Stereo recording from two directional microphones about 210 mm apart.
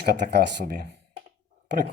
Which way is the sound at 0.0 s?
50° right (ahead or behind).